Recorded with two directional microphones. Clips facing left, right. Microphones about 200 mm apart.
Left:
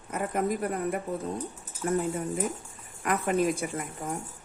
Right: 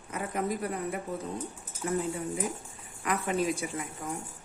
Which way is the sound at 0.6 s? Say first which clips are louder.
Left 4 dB; 50° left (ahead or behind).